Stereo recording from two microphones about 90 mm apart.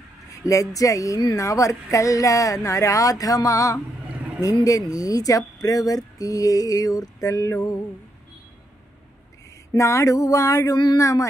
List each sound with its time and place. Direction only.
0.4 s speech: 35° left (ahead or behind)
9.8 s speech: 35° left (ahead or behind)